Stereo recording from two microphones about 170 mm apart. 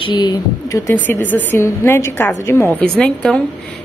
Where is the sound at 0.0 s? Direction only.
25° left (ahead or behind).